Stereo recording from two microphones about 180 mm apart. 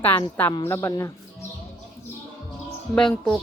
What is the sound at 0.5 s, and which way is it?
Speech, 15° left (ahead or behind).